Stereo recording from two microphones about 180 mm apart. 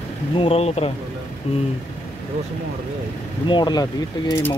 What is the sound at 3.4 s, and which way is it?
Speech, 25° left (ahead or behind).